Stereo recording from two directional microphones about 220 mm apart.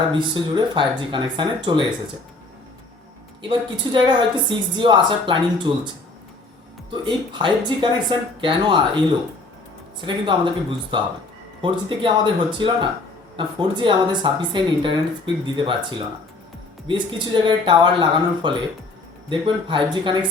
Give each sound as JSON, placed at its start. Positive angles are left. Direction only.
{"t": 0.1, "sound": "speech", "side_deg": -20}
{"t": 3.5, "sound": "speech", "side_deg": -20}
{"t": 6.9, "sound": "speech", "side_deg": -20}
{"t": 10.2, "sound": "speech", "side_deg": -20}